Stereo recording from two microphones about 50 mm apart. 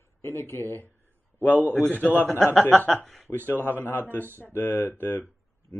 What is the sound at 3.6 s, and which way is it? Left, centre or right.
Speech, left.